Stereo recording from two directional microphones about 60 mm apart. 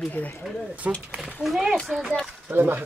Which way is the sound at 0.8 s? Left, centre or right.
Right.